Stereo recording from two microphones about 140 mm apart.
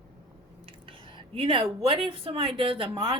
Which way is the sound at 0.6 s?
40° right (ahead or behind).